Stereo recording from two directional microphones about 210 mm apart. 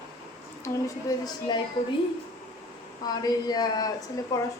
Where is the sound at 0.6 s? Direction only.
15° left (ahead or behind).